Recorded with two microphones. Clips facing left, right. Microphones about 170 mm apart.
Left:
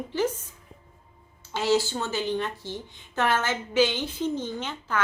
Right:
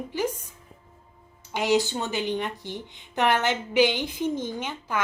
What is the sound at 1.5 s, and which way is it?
A woman's voice, 15° right (ahead or behind).